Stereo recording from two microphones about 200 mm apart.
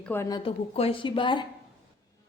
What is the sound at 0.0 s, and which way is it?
A woman's voice, 10° left (ahead or behind).